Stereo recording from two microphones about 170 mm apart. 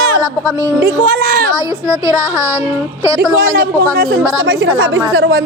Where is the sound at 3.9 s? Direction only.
65° right (ahead or behind).